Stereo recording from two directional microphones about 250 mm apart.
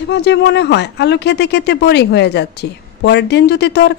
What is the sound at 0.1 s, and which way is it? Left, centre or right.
Speech, left.